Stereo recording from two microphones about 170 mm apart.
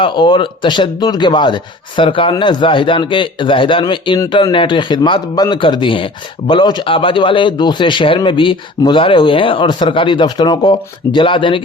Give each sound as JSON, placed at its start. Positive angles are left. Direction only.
{"t": 0.0, "sound": "a man's voice", "side_deg": 30}